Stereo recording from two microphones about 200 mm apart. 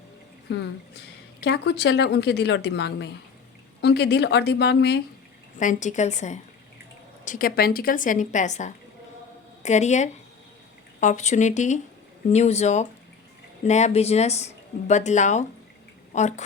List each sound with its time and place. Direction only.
0.5 s a woman's voice: 60° left (ahead or behind)
5.5 s speech: 40° left (ahead or behind)